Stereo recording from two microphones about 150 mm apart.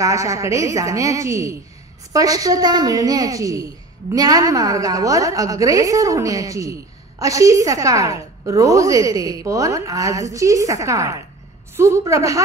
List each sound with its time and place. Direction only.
0.0 s a woman's voice: 20° right (ahead or behind)